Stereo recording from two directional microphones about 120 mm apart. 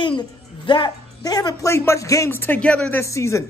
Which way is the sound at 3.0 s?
25° left (ahead or behind).